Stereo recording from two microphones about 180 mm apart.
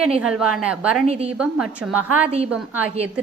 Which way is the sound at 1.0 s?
35° right (ahead or behind).